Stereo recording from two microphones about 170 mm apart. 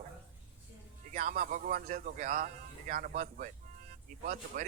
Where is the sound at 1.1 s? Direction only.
45° right (ahead or behind).